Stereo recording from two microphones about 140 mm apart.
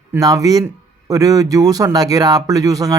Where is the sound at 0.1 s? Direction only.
25° right (ahead or behind).